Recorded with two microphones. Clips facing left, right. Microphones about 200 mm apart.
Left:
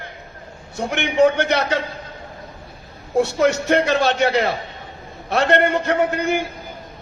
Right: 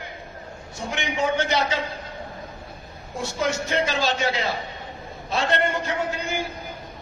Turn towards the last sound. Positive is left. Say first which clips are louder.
# left 8 dB
turn(degrees=65)  # may be behind; listen again after turning